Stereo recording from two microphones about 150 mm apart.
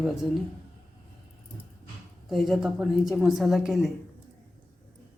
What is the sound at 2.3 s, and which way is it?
Speech, centre (ahead or behind).